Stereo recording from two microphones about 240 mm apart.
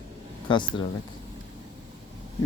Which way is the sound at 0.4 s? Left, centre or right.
Centre.